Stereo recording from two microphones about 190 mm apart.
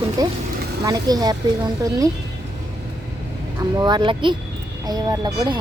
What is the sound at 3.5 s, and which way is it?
A woman's voice, 20° right (ahead or behind).